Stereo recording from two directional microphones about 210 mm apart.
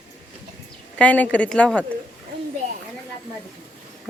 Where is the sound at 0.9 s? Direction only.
5° left (ahead or behind).